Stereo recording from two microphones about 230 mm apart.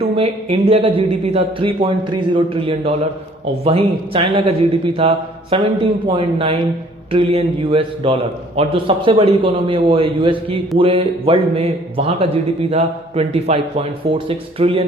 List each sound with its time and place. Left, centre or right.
0.2 s a man's voice: right